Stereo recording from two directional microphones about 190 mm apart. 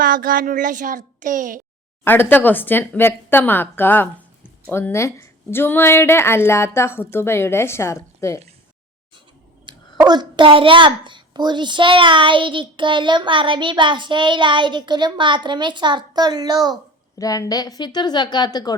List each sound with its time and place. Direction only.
0.0 s a child's voice: 50° right (ahead or behind)
2.0 s a woman's voice: 10° left (ahead or behind)
9.6 s a child's voice: 20° right (ahead or behind)
17.2 s a woman's voice: 20° left (ahead or behind)